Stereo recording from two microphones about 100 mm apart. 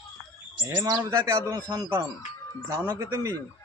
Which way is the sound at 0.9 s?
45° right (ahead or behind).